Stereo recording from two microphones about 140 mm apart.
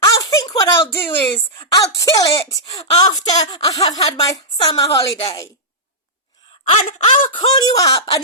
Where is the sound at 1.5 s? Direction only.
30° left (ahead or behind).